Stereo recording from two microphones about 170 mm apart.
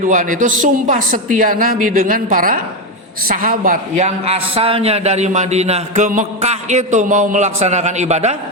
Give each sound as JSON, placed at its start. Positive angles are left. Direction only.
{"t": 0.0, "sound": "a man's voice", "side_deg": -50}